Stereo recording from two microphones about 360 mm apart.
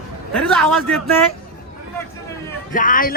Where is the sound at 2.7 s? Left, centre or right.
Left.